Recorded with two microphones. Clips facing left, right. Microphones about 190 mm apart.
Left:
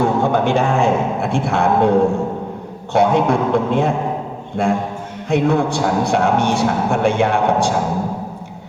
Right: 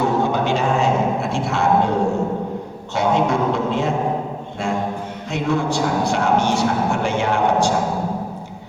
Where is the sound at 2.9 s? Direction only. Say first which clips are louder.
Left 4 dB; 55° left (ahead or behind).